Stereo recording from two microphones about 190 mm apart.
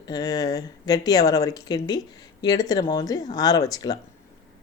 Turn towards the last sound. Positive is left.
turn(degrees=20)  # may be behind; listen again after turning